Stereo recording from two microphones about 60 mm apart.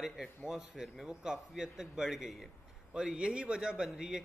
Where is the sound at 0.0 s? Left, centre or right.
Centre.